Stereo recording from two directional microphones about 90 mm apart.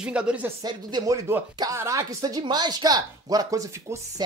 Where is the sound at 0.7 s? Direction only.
45° right (ahead or behind).